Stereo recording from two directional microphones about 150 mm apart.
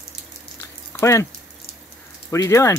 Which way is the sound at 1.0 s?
20° left (ahead or behind).